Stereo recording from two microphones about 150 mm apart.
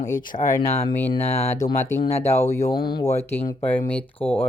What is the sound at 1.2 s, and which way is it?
Speech, 45° left (ahead or behind).